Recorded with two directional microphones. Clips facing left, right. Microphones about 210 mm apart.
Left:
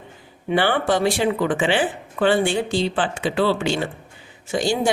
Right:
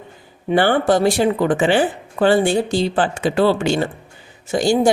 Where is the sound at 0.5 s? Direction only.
45° right (ahead or behind).